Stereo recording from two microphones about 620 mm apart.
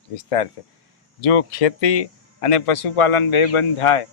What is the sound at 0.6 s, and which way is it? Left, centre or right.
A man's voice, left.